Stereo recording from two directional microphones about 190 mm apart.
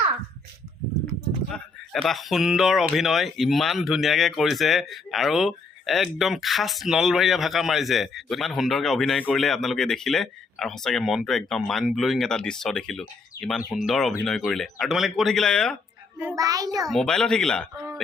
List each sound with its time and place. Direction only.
1.5 s speech: 5° left (ahead or behind)
16.3 s a child's voice: 20° right (ahead or behind)
16.8 s speech: centre (ahead or behind)